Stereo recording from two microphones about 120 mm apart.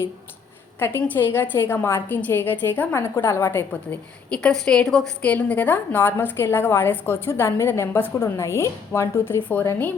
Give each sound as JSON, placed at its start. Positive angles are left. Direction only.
{"t": 0.8, "sound": "a woman's voice", "side_deg": 15}
{"t": 4.3, "sound": "a woman's voice", "side_deg": 5}